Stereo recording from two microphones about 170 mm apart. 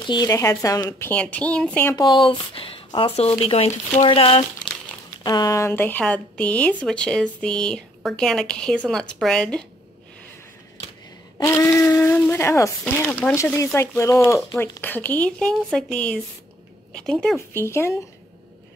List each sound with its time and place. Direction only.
0.0 s speech: 25° left (ahead or behind); by 2.0 s 10° left (ahead or behind)
2.0 s speech: 25° left (ahead or behind)
5.2 s speech: 20° left (ahead or behind); by 9.7 s 5° left (ahead or behind)
11.3 s speech: 15° left (ahead or behind)